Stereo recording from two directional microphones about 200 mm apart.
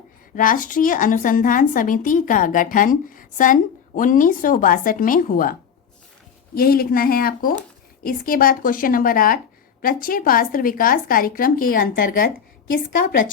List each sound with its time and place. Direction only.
0.3 s a woman's voice: 45° left (ahead or behind)